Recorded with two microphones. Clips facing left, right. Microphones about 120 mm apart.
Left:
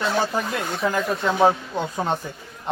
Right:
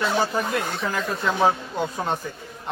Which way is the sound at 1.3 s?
25° left (ahead or behind).